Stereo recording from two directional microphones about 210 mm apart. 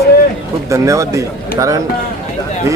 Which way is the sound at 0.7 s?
15° right (ahead or behind).